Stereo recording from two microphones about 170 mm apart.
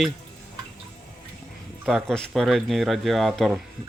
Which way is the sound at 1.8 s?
Centre (ahead or behind).